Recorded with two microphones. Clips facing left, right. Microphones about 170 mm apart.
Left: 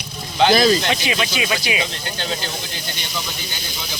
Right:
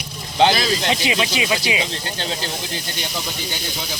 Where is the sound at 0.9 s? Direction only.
25° right (ahead or behind).